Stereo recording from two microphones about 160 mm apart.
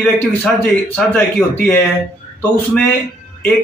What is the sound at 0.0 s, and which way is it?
A man's voice, 5° left (ahead or behind).